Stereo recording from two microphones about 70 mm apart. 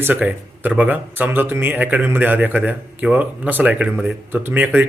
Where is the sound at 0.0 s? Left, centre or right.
Right.